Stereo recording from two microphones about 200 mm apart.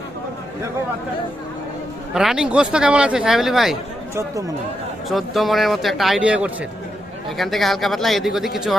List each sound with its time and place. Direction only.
2.1 s speech: 5° right (ahead or behind)
4.1 s speech: 15° right (ahead or behind)
5.0 s speech: centre (ahead or behind)